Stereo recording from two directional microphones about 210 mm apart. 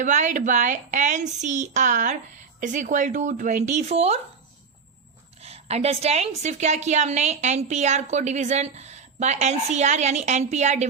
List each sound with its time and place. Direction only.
0.0 s a woman's voice: 35° right (ahead or behind)
5.4 s a woman's voice: 30° right (ahead or behind)